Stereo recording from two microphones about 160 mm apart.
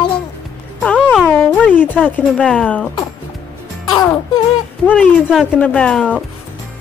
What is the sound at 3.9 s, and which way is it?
Music, 25° left (ahead or behind).